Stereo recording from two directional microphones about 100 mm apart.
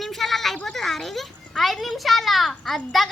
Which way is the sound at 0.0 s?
Centre (ahead or behind).